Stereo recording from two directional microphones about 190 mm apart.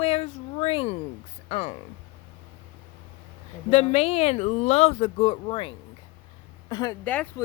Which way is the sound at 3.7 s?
35° left (ahead or behind).